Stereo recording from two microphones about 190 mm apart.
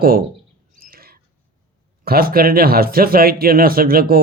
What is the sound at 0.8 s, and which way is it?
Bird, 50° right (ahead or behind).